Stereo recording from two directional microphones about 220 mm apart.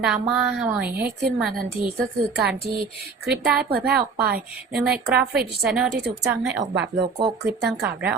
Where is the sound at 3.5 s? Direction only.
45° right (ahead or behind).